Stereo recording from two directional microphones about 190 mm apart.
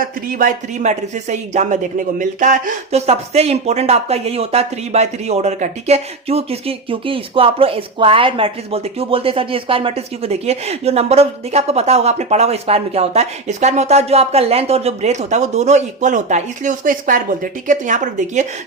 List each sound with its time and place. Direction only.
0.0 s speech: 45° right (ahead or behind)